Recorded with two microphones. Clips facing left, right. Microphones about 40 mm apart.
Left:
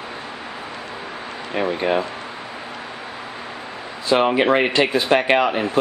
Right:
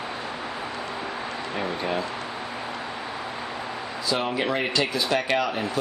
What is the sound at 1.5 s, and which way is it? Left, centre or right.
Speech, left.